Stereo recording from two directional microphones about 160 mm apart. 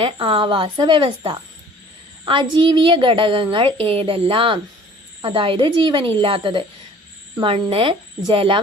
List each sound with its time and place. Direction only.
0.0 s a child's voice: 35° right (ahead or behind)